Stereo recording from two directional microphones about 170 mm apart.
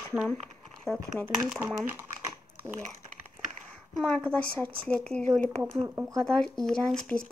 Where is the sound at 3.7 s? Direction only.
5° left (ahead or behind).